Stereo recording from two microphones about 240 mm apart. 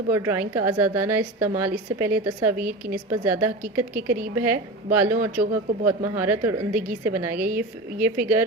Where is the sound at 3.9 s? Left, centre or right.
Right.